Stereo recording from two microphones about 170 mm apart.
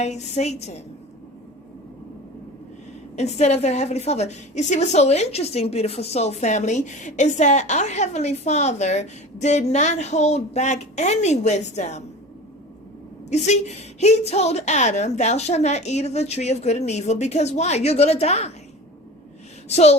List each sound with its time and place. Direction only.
0.0 s a woman's voice: 40° left (ahead or behind)
3.2 s a woman's voice: 40° left (ahead or behind)
13.3 s a woman's voice: 40° left (ahead or behind)
19.6 s a woman's voice: 40° left (ahead or behind)